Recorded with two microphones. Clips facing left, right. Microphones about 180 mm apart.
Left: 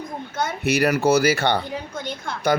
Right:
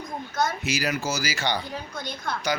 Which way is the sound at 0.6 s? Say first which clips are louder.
Left 9 dB; 60° left (ahead or behind).